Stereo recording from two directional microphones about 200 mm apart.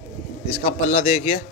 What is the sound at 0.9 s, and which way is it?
Speech, 30° left (ahead or behind).